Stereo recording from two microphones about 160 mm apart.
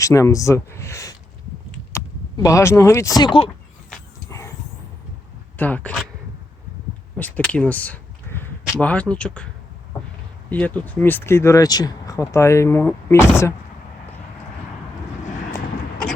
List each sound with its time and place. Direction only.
0.0 s speech: 20° left (ahead or behind)
4.3 s vehicle: 20° left (ahead or behind)
5.5 s speech: 10° left (ahead or behind)
7.2 s speech: 10° left (ahead or behind)
10.5 s speech: 10° left (ahead or behind)